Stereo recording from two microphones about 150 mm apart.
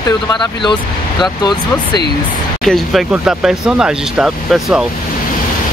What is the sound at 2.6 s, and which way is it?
Speech, centre (ahead or behind).